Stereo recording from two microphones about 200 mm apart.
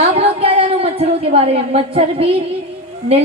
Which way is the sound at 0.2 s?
30° right (ahead or behind).